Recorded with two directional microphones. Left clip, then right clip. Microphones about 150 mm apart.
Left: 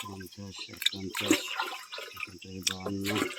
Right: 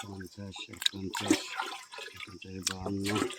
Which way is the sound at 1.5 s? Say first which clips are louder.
Left 2 dB; 30° right (ahead or behind).